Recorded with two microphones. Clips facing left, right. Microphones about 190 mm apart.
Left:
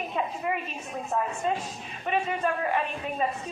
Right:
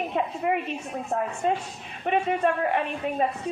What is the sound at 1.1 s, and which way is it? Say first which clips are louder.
Speech: right 1 dB; 50° right (ahead or behind).